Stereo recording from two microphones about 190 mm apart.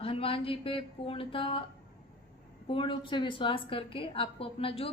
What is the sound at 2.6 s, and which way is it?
A woman's voice, 25° left (ahead or behind).